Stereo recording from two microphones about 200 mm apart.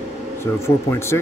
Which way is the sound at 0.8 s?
15° left (ahead or behind).